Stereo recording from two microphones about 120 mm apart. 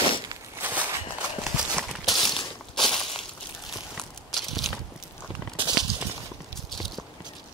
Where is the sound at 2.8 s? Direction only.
45° left (ahead or behind).